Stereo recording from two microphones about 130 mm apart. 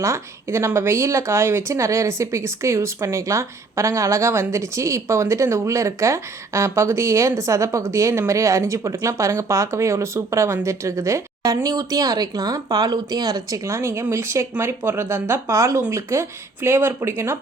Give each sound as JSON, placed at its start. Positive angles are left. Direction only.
{"t": 0.0, "sound": "speech", "side_deg": -20}